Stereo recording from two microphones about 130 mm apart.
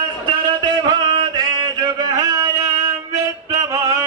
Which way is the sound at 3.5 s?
25° right (ahead or behind).